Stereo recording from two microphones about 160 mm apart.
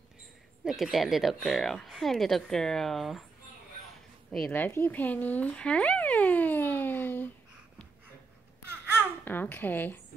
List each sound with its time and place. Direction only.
0.7 s speech: centre (ahead or behind)
4.3 s a sound: 5° left (ahead or behind)
8.6 s babbling: 15° right (ahead or behind)
9.2 s a child's voice: 10° left (ahead or behind)